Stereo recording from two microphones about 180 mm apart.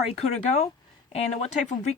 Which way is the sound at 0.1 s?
35° left (ahead or behind).